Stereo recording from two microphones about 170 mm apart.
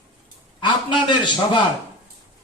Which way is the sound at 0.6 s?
25° left (ahead or behind).